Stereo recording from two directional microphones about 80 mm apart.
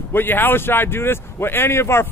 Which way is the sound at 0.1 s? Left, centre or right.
Left.